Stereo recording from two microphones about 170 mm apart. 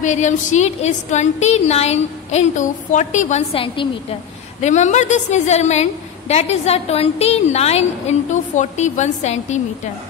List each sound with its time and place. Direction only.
0.0 s a woman's voice: 45° left (ahead or behind)
4.6 s a woman's voice: 45° left (ahead or behind)